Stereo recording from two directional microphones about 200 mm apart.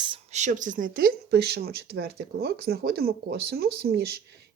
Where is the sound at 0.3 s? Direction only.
40° right (ahead or behind).